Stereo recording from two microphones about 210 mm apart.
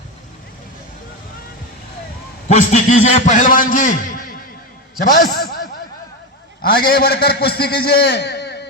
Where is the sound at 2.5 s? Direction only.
35° left (ahead or behind).